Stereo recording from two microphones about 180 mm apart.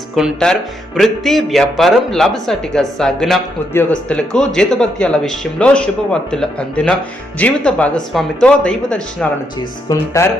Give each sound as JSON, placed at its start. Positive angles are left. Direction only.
{"t": 0.2, "sound": "speech", "side_deg": 0}
{"t": 9.9, "sound": "speech", "side_deg": 15}